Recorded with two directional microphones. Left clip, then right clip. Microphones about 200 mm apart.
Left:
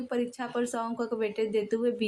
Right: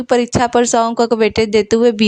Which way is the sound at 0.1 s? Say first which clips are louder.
Right 19 dB; 50° right (ahead or behind).